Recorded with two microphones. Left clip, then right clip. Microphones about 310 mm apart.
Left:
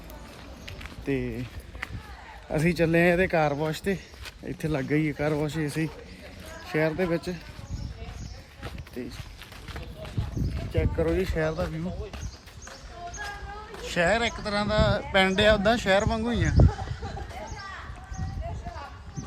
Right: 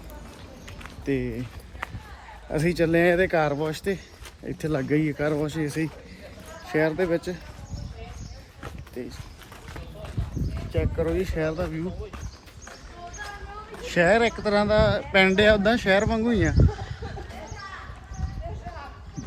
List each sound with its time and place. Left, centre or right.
1.0 s speech: centre
2.5 s speech: centre
9.0 s speech: centre
10.7 s speech: centre
11.3 s speech: left
13.8 s speech: centre